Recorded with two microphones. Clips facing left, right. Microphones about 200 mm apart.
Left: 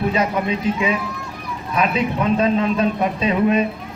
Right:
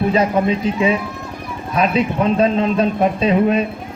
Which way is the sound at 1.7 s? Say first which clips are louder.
Right 3 dB; 30° right (ahead or behind).